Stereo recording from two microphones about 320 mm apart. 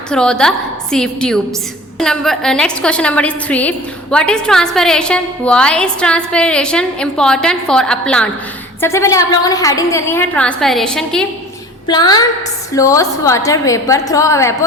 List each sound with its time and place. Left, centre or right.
0.1 s a woman's voice: centre
11.9 s a woman's voice: centre